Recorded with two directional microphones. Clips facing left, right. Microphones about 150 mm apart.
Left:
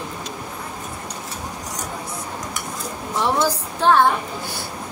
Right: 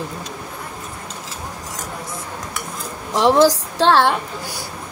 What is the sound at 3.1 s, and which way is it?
A woman's voice, 90° right.